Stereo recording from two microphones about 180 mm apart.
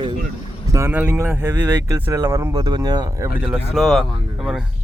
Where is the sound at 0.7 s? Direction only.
10° right (ahead or behind).